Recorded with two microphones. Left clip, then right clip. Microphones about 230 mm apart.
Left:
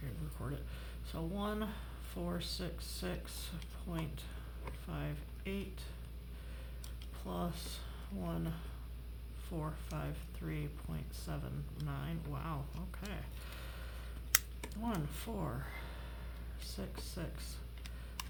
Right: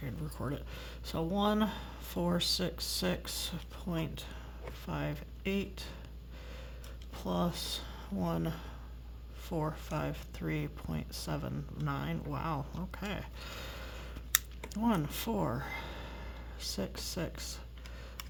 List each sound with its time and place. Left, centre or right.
0.3 s speech: right
7.2 s speech: right